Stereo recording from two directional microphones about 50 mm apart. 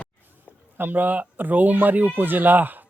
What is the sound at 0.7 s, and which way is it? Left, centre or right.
Speech, right.